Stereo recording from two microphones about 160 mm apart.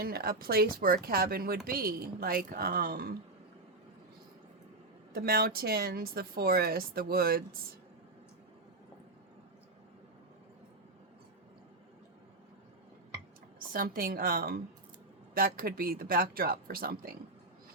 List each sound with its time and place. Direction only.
0.0 s speech: 70° right (ahead or behind)
5.1 s speech: 70° right (ahead or behind)
13.7 s a woman's voice: 65° right (ahead or behind)